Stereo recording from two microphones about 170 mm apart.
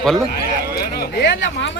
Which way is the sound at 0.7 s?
65° left (ahead or behind).